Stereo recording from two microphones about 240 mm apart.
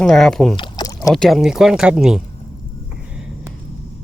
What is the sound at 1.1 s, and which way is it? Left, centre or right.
Speech, centre.